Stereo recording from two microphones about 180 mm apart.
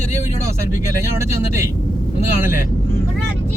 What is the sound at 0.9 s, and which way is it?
Speech, 15° right (ahead or behind).